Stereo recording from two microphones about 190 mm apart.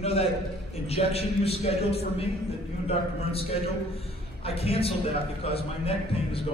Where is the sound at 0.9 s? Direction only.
30° left (ahead or behind).